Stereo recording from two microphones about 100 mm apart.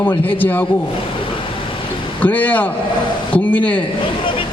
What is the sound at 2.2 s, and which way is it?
A man's voice, 15° left (ahead or behind).